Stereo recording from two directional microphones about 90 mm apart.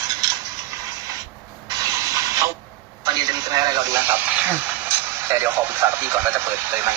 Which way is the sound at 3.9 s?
20° right (ahead or behind).